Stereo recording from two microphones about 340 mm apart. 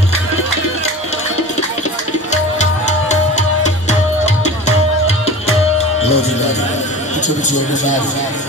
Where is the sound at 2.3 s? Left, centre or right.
Centre.